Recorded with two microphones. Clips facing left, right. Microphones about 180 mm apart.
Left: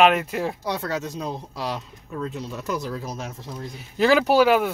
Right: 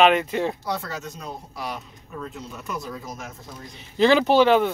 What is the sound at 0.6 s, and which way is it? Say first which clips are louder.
Speech: left 3 dB; 90° left.